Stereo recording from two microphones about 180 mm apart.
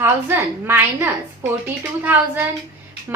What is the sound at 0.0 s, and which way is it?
A woman's voice, 10° right (ahead or behind).